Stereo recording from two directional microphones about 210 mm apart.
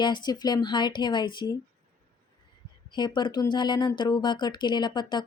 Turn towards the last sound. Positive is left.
turn(degrees=20)  # may be behind; listen again after turning